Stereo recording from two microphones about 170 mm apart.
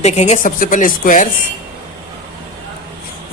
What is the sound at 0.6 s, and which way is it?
Speech, 55° left (ahead or behind).